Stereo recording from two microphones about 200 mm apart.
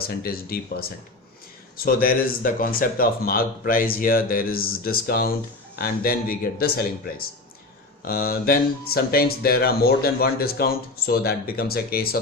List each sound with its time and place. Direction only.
0.1 s speech: 50° left (ahead or behind)